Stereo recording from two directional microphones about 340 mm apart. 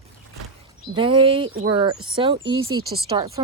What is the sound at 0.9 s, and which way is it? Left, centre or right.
Speech, centre.